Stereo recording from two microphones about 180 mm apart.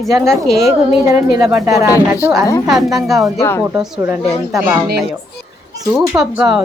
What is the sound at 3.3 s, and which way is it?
Speech, 15° left (ahead or behind).